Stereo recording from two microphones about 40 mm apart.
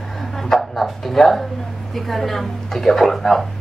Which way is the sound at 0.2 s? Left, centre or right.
Centre.